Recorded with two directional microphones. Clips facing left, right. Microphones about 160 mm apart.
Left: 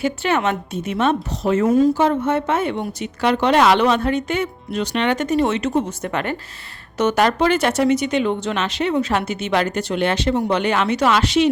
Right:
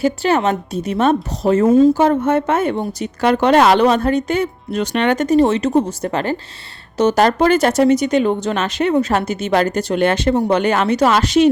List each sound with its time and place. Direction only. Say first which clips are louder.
0.0 s speech: right 4 dB; 35° right (ahead or behind)